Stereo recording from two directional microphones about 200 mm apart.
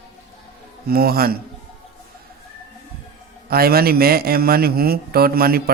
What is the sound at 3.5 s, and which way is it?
A man's voice, 50° right (ahead or behind).